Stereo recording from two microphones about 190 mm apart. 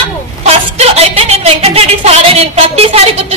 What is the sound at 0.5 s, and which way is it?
A woman's voice, 35° right (ahead or behind).